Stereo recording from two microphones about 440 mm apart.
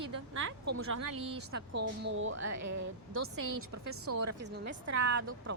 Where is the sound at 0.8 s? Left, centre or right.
Right.